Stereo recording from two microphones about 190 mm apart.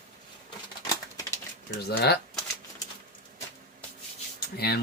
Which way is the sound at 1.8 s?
60° left (ahead or behind).